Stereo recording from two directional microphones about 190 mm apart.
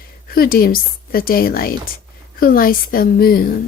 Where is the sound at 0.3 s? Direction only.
50° left (ahead or behind).